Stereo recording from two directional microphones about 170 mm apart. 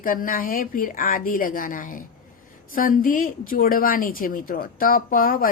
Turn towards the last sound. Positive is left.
turn(degrees=55)  # may be behind; listen again after turning